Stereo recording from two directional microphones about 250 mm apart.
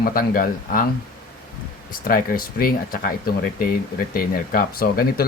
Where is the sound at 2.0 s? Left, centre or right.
Left.